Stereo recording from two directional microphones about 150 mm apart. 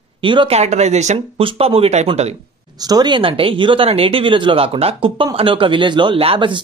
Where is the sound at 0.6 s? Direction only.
50° right (ahead or behind).